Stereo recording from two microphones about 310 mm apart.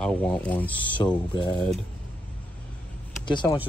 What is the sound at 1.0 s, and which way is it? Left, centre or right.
Speech, centre.